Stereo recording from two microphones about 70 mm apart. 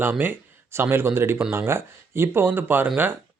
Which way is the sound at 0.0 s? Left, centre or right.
Right.